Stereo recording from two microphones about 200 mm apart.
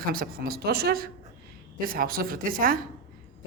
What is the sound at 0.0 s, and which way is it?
A man's voice, 45° right (ahead or behind).